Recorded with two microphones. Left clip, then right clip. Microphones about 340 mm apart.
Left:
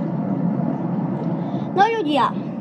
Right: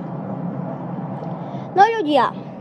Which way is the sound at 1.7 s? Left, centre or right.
Right.